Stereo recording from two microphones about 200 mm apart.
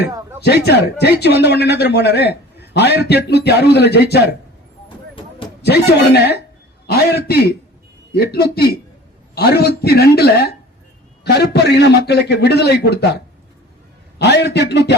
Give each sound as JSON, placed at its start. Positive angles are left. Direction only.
{"t": 0.4, "sound": "a man's voice", "side_deg": 55}
{"t": 5.6, "sound": "a man's voice", "side_deg": 55}